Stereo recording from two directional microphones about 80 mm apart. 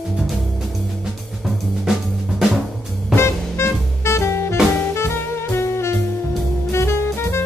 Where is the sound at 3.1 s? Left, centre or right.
Left.